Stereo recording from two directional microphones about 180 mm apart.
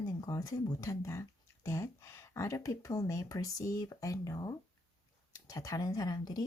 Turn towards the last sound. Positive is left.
turn(degrees=20)  # may be behind; listen again after turning